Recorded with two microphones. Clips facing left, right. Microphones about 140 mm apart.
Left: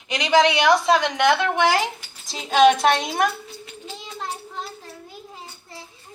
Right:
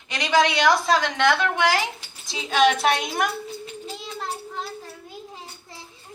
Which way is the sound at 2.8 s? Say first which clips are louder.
Left 3 dB; 30° left (ahead or behind).